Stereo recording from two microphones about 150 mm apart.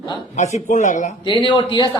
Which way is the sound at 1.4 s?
30° left (ahead or behind).